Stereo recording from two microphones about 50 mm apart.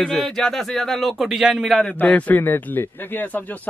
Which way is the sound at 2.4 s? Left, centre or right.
Left.